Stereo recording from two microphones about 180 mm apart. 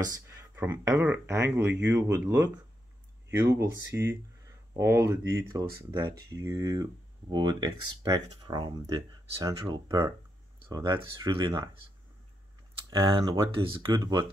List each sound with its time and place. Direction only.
0.0 s speech: 20° right (ahead or behind)
12.9 s speech: 20° right (ahead or behind)